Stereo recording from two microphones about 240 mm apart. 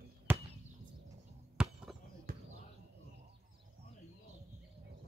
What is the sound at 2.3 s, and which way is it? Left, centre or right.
Basketball bounce, right.